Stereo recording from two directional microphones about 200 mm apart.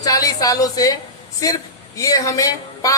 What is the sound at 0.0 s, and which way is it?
A woman's voice, 15° left (ahead or behind).